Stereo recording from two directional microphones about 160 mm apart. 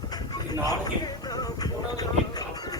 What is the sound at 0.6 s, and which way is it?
Music, 25° left (ahead or behind).